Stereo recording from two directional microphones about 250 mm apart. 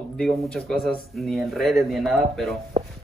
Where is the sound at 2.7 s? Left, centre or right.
Right.